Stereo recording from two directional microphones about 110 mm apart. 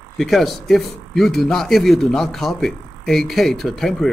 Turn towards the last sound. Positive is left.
turn(degrees=0)  # may be behind; listen again after turning